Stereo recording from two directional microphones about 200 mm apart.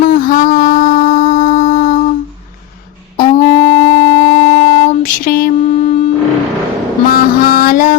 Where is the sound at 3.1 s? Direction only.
40° left (ahead or behind).